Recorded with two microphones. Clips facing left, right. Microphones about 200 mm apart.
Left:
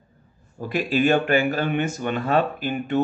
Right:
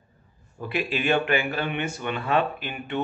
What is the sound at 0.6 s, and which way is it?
Speech, 40° left (ahead or behind).